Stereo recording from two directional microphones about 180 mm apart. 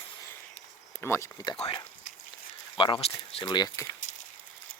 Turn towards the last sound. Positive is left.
turn(degrees=20)  # may be behind; listen again after turning